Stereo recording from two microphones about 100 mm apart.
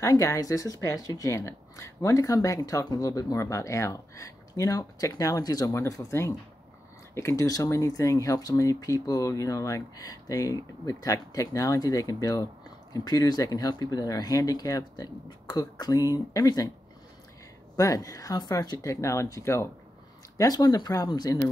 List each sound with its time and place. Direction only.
0.0 s speech: 30° left (ahead or behind)
17.7 s speech: 35° left (ahead or behind)
20.3 s speech: 40° left (ahead or behind)